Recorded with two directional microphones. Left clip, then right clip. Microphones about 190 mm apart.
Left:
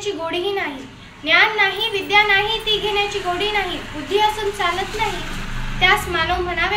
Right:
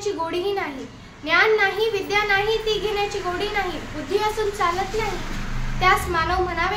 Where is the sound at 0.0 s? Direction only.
15° right (ahead or behind).